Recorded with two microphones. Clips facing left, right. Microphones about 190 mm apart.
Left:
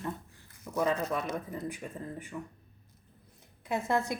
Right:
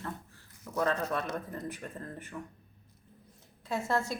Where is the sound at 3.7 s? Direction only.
15° left (ahead or behind).